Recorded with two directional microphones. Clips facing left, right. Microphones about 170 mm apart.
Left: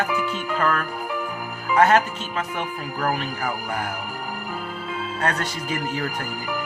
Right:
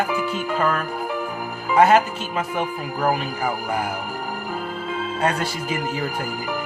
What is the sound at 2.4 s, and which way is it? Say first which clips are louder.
Speech: right 4 dB; 30° right (ahead or behind).